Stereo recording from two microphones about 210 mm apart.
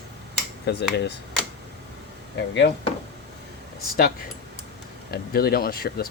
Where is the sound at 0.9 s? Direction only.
55° left (ahead or behind).